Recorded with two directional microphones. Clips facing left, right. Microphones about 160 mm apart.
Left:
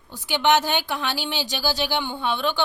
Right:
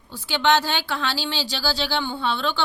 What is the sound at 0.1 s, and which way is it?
A woman's voice, 15° left (ahead or behind).